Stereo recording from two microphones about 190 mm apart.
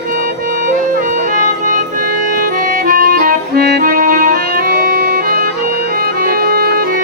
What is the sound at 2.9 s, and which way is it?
Music, 45° right (ahead or behind).